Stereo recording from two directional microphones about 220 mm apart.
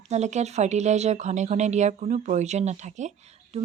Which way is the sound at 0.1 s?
30° right (ahead or behind).